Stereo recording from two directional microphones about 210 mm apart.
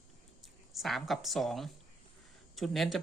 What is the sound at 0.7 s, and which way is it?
Speech, centre (ahead or behind).